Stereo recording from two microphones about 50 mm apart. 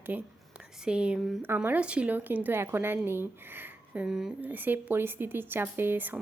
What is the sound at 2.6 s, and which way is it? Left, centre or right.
Speech, right.